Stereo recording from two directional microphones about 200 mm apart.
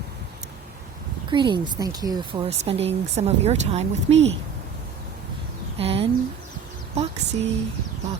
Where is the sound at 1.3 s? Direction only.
25° right (ahead or behind).